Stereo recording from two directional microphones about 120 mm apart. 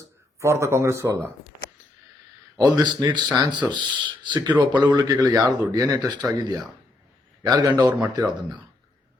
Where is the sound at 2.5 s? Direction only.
35° right (ahead or behind).